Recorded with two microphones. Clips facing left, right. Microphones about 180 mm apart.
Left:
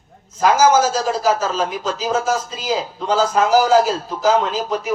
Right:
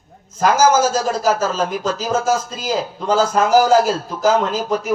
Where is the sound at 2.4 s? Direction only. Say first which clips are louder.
Right 2 dB; 45° right (ahead or behind).